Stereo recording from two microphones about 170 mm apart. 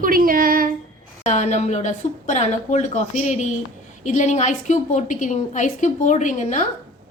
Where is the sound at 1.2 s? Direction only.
45° left (ahead or behind).